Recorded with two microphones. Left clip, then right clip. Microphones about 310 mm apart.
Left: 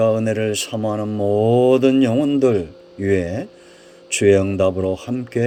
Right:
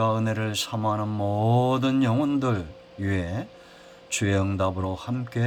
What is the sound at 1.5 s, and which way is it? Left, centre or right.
Speech, left.